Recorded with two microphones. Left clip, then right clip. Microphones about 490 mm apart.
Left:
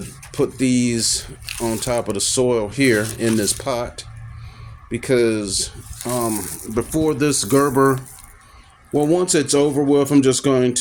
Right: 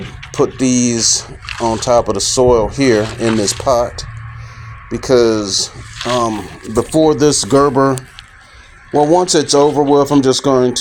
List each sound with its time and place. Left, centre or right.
0.3 s speech: left
9.1 s speech: left